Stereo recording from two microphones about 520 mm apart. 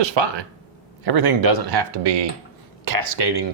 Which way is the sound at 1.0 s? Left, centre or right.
Right.